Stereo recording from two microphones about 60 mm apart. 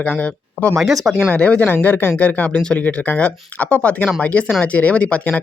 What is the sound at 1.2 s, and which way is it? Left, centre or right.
Speech, left.